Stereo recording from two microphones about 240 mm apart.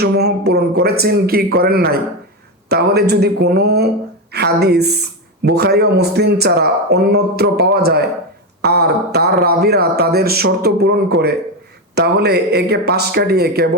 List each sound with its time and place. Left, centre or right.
0.0 s speech: right